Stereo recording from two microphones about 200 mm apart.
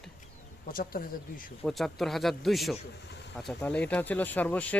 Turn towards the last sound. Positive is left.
turn(degrees=5)  # may be behind; listen again after turning